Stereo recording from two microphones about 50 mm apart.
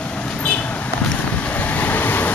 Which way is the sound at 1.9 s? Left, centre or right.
Left.